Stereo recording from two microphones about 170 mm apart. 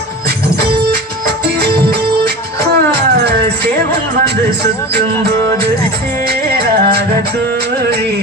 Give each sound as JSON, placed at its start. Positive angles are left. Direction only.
{"t": 1.5, "sound": "music", "side_deg": -80}
{"t": 6.2, "sound": "music", "side_deg": -75}